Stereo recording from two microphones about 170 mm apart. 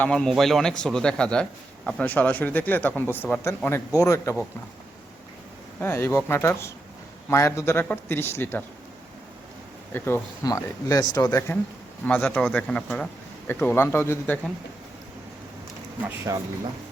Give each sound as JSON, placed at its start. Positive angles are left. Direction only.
{"t": 0.0, "sound": "a man's voice", "side_deg": 5}
{"t": 5.8, "sound": "a man's voice", "side_deg": 15}
{"t": 9.9, "sound": "a man's voice", "side_deg": 15}
{"t": 16.0, "sound": "speech", "side_deg": -15}